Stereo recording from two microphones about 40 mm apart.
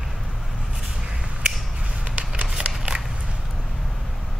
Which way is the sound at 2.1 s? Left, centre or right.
Right.